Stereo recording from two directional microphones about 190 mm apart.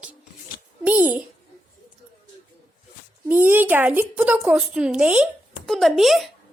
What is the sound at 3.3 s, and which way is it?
Speech, 10° right (ahead or behind).